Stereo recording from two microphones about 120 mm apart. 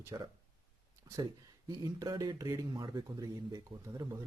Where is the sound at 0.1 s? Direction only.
30° right (ahead or behind).